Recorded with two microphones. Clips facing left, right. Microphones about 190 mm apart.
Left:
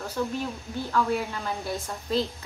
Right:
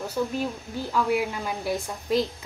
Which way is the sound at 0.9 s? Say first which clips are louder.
Right 2 dB; 10° right (ahead or behind).